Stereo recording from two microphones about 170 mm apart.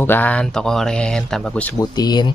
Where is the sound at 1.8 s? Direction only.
25° left (ahead or behind).